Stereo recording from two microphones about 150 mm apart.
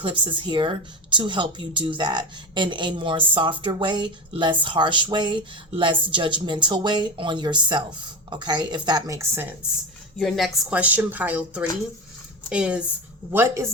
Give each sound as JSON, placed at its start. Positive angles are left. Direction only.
{"t": 0.0, "sound": "a woman's voice", "side_deg": -35}
{"t": 10.2, "sound": "a woman's voice", "side_deg": 0}
{"t": 13.3, "sound": "speech", "side_deg": -20}